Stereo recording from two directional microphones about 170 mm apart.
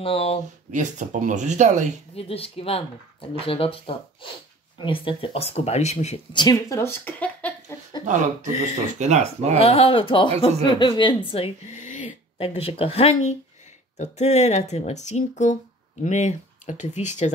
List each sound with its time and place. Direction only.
0.0 s speech: 35° left (ahead or behind)
0.7 s speech: 45° right (ahead or behind)
2.1 s speech: 35° left (ahead or behind)
6.3 s speech: 20° left (ahead or behind)
9.0 s speech: 40° right (ahead or behind)
9.6 s speech: 35° left (ahead or behind)
11.3 s a sound: 40° left (ahead or behind)
12.4 s speech: 35° left (ahead or behind)